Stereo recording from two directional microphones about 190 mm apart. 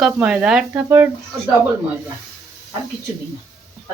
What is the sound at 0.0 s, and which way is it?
Speech, 5° right (ahead or behind).